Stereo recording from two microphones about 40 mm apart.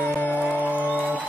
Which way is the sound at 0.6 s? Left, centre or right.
Right.